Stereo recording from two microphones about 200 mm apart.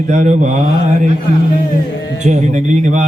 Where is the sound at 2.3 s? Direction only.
35° right (ahead or behind).